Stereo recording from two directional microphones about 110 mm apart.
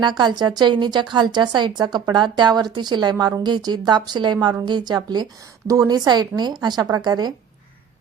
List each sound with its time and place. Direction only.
0.0 s a woman's voice: 40° right (ahead or behind)